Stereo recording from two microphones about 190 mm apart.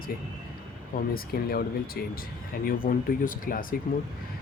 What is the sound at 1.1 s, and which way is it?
Speech, 50° left (ahead or behind).